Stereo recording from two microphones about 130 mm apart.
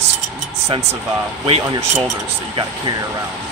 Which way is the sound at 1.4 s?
45° right (ahead or behind).